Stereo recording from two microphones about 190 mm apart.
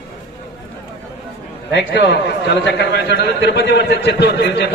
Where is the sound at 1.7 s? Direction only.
65° left (ahead or behind).